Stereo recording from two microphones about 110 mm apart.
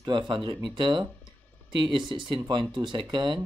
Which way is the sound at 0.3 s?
50° right (ahead or behind).